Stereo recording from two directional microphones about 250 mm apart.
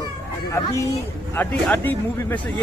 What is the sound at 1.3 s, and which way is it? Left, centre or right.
A man's voice, centre.